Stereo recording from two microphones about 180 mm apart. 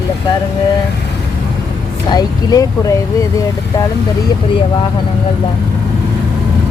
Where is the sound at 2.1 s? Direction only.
20° left (ahead or behind).